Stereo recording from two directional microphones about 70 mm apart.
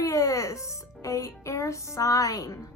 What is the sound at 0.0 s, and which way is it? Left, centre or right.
Music, left.